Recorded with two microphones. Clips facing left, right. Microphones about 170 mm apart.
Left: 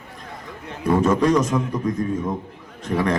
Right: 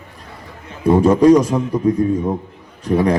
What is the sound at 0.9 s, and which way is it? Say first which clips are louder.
Speech: right 7 dB; 30° right (ahead or behind).